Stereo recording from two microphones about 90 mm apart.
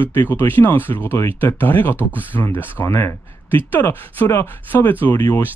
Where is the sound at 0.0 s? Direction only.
20° left (ahead or behind).